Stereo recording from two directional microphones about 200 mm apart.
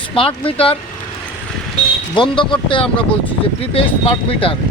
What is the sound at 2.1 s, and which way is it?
Speech, 25° left (ahead or behind).